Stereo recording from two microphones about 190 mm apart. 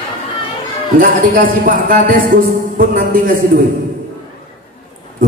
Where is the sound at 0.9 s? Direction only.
50° right (ahead or behind).